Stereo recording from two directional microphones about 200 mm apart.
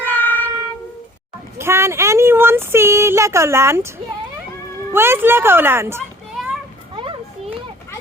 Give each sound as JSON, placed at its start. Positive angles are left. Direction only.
{"t": 0.0, "sound": "a sound", "side_deg": 10}
{"t": 1.5, "sound": "speech", "side_deg": -15}
{"t": 6.4, "sound": "children playing", "side_deg": 0}
{"t": 6.9, "sound": "children playing", "side_deg": -25}